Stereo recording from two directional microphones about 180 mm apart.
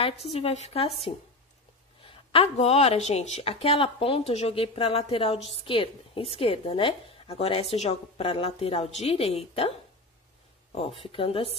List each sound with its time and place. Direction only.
0.3 s a woman's voice: 35° left (ahead or behind)
2.0 s a woman's voice: 35° left (ahead or behind)